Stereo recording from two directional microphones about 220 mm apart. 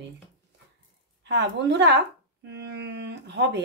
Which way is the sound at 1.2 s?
50° right (ahead or behind).